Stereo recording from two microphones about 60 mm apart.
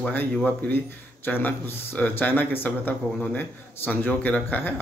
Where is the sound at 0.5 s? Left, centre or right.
Left.